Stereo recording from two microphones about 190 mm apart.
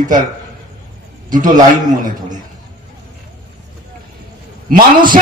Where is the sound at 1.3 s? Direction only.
45° right (ahead or behind).